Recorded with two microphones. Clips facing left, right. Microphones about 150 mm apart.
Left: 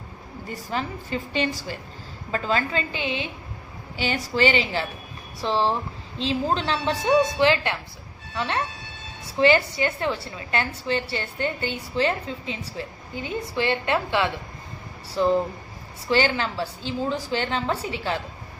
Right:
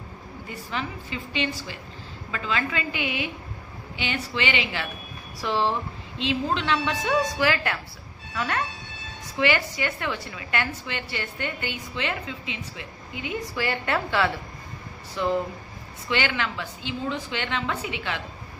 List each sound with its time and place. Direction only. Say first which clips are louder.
0.5 s a woman's voice: left 3 dB; 40° left (ahead or behind); by 14.3 s 20° left (ahead or behind)
15.0 s a woman's voice: left 4 dB; 30° left (ahead or behind)